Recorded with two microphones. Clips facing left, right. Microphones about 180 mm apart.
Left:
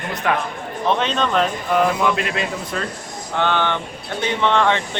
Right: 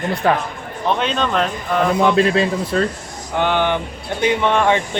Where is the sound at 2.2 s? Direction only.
30° right (ahead or behind).